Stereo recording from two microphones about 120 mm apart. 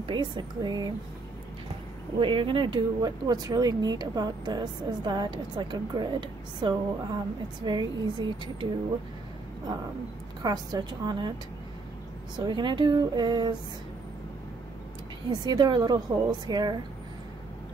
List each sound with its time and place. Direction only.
0.0 s speech: 40° right (ahead or behind)
2.1 s speech: 45° right (ahead or behind)
10.4 s speech: 35° right (ahead or behind)
12.4 s speech: 40° right (ahead or behind)
15.2 s speech: 35° right (ahead or behind)